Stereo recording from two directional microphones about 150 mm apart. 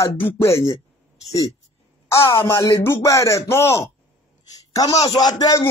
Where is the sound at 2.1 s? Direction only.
20° left (ahead or behind).